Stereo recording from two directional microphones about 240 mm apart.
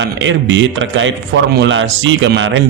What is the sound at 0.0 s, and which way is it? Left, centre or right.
Speech, right.